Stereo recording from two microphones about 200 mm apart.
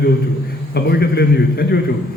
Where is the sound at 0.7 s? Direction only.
55° left (ahead or behind).